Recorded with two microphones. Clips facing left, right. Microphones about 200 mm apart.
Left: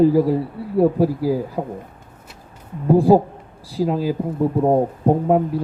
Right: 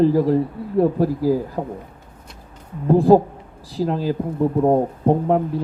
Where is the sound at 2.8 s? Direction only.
10° left (ahead or behind).